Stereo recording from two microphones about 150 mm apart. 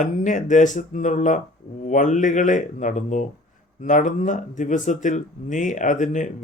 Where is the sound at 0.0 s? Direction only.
55° left (ahead or behind).